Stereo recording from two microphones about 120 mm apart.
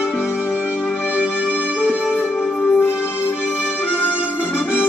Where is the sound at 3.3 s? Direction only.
5° right (ahead or behind).